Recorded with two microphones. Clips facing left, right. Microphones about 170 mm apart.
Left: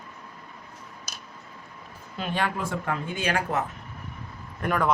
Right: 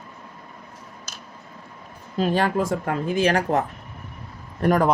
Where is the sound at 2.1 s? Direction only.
40° right (ahead or behind).